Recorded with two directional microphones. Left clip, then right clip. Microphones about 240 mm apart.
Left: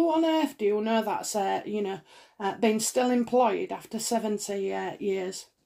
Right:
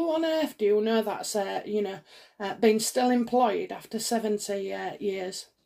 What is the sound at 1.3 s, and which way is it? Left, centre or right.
Speech, left.